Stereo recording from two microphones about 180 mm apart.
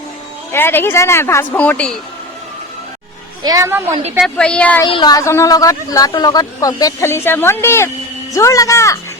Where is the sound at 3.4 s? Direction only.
20° right (ahead or behind).